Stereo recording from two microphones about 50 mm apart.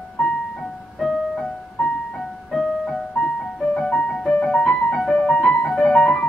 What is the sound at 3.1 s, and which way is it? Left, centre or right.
Music, left.